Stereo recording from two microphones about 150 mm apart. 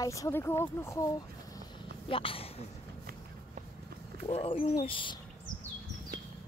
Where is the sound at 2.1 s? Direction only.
35° left (ahead or behind).